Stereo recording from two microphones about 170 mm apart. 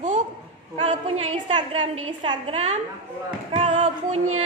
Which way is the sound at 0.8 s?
35° right (ahead or behind).